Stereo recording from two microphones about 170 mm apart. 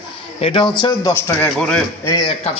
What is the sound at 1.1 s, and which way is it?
Speech, 15° left (ahead or behind).